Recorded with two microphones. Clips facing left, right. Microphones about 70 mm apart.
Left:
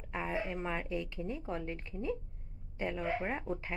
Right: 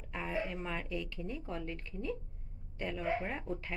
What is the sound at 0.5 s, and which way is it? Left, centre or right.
A woman's voice, centre.